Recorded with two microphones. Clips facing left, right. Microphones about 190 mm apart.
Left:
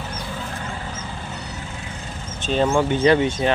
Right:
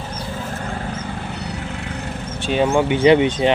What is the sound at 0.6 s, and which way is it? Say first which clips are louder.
Vehicle: right 5 dB; 60° right (ahead or behind).